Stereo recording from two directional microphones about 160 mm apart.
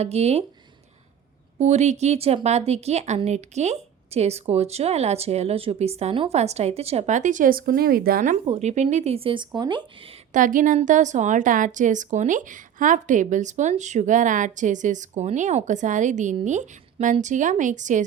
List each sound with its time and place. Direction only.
0.0 s speech: 40° right (ahead or behind)
1.5 s a woman's voice: 45° right (ahead or behind); by 8.4 s 60° right (ahead or behind)
8.4 s speech: 45° right (ahead or behind); by 9.8 s 25° right (ahead or behind)
10.3 s a woman's voice: 55° right (ahead or behind)